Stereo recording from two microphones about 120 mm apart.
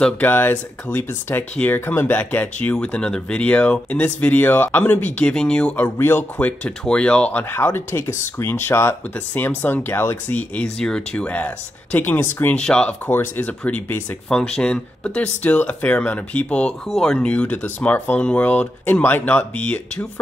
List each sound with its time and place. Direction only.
0.0 s speech: 15° left (ahead or behind)